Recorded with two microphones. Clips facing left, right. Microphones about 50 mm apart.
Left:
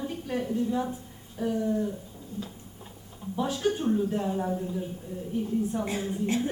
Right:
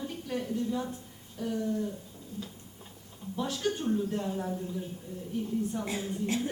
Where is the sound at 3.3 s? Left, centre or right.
Centre.